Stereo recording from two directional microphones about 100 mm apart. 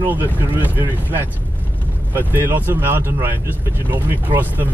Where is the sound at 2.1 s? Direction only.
20° right (ahead or behind).